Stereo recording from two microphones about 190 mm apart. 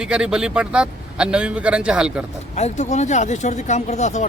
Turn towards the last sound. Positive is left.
turn(degrees=40)  # may be behind; listen again after turning